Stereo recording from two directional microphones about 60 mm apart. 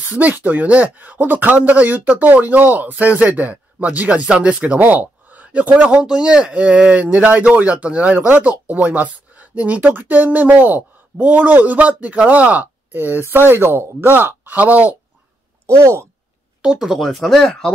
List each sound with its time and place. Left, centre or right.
0.0 s speech: right
4.7 s speech: right
15.6 s speech: right
16.6 s speech: centre
17.0 s speech: centre